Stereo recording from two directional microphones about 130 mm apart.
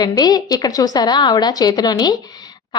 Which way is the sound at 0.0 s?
30° left (ahead or behind).